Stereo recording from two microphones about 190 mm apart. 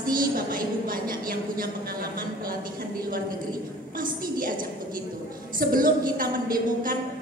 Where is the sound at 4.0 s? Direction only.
45° right (ahead or behind).